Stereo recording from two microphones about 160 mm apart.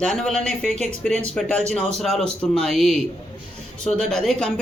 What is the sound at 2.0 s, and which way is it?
Speech, centre (ahead or behind).